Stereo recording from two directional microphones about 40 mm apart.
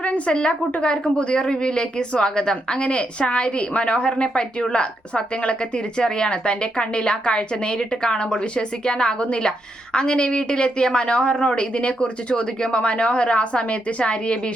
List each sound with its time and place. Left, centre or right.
0.3 s a woman's voice: left